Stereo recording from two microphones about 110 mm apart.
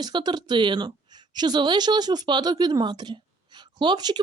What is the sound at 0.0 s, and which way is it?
A woman's voice, 40° right (ahead or behind).